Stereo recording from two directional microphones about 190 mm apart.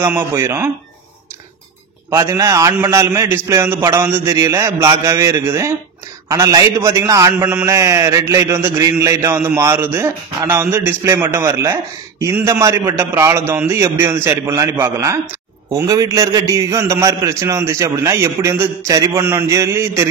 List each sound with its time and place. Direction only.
0.0 s a man's voice: 15° right (ahead or behind)
2.0 s a man's voice: 15° right (ahead or behind)